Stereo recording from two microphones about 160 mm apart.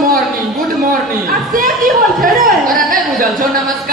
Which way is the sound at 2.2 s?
60° right (ahead or behind).